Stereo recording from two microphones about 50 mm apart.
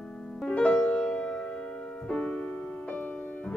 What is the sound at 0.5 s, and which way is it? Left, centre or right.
Music, left.